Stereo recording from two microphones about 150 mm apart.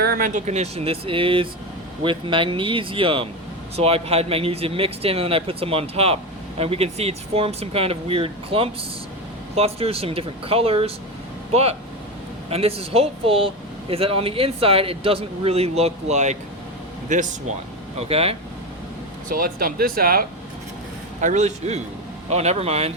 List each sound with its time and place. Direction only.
0.0 s speech: 70° right (ahead or behind)
0.4 s speech: 45° right (ahead or behind)
17.9 s speech: 40° right (ahead or behind)
19.3 s speech: 70° right (ahead or behind)
21.2 s speech: 50° right (ahead or behind)